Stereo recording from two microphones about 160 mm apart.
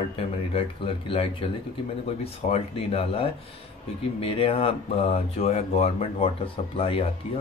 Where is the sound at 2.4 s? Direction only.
40° left (ahead or behind).